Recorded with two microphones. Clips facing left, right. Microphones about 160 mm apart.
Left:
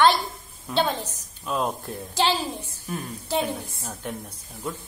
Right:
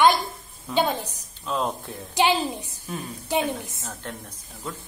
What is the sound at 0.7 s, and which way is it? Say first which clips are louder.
Speech: right 1 dB; 10° right (ahead or behind).